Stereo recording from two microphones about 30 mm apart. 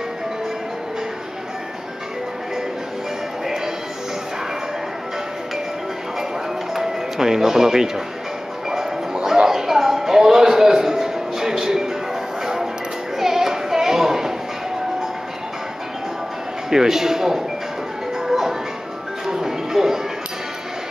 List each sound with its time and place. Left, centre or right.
6.7 s speech: centre
9.1 s a sound: right
13.2 s child singing: centre
16.7 s a man's voice: centre
18.2 s music: centre